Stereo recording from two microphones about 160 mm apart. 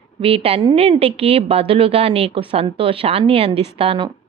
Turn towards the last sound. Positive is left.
turn(degrees=-35)  # may be behind; listen again after turning